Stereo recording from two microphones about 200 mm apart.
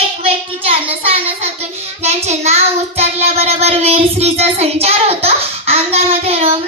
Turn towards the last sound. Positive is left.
turn(degrees=-30)  # may be behind; listen again after turning